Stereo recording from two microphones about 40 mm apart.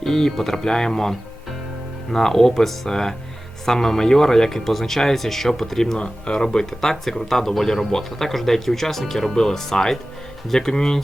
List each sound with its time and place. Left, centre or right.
0.0 s speech: centre
6.0 s speech: left